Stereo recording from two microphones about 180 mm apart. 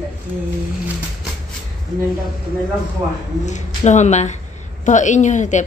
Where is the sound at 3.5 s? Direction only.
40° left (ahead or behind).